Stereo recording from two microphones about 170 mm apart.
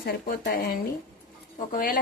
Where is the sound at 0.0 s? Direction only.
60° left (ahead or behind).